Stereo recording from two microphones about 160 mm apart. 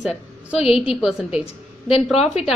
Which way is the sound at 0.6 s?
40° left (ahead or behind).